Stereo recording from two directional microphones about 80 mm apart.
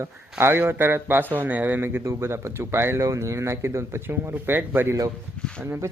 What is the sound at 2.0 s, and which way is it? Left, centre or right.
Speech, right.